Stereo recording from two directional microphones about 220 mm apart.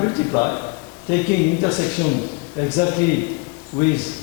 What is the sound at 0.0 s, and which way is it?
A man's voice, 20° left (ahead or behind).